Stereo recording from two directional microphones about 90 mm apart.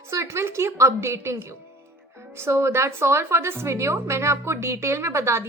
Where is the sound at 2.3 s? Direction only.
30° right (ahead or behind).